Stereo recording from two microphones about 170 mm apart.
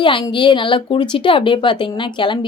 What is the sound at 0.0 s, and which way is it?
Speech, 30° left (ahead or behind).